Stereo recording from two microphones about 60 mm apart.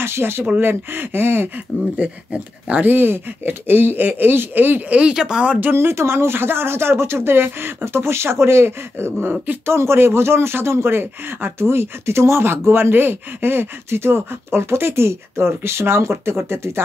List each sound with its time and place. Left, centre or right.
0.0 s speech: right
2.0 s speech: right
5.6 s speech: right